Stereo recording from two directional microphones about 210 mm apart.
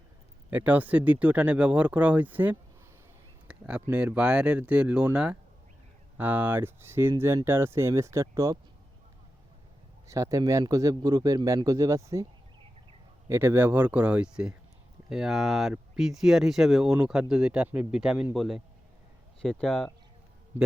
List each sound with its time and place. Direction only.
0.5 s a man's voice: 10° right (ahead or behind)
10.1 s a man's voice: 15° right (ahead or behind)
13.2 s a man's voice: 10° right (ahead or behind)